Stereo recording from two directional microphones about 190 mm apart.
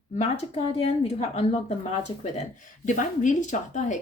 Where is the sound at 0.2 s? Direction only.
35° left (ahead or behind).